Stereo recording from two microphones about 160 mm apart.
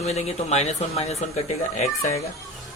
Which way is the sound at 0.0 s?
40° left (ahead or behind).